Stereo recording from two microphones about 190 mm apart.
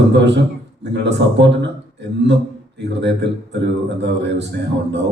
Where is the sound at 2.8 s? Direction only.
65° right (ahead or behind).